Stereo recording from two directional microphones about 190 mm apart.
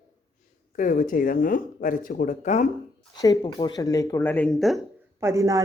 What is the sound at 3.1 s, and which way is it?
Speech, 20° left (ahead or behind).